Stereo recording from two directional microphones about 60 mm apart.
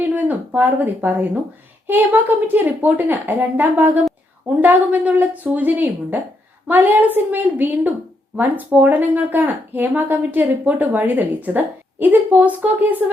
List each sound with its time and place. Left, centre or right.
0.0 s speech: right
2.5 s a woman's voice: right